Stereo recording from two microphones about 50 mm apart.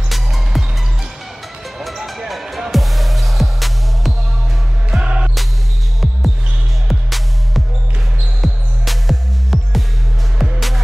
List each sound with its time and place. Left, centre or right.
0.1 s music: centre
1.8 s music: centre
5.0 s music: right
6.9 s music: centre